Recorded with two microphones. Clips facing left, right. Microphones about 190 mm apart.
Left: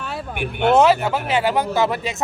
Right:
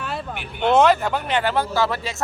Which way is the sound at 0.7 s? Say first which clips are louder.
Left 1 dB; 5° left (ahead or behind).